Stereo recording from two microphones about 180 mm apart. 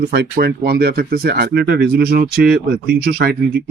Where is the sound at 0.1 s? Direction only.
60° right (ahead or behind).